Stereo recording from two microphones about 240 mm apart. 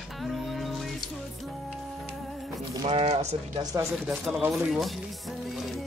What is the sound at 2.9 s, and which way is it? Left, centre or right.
Speech, right.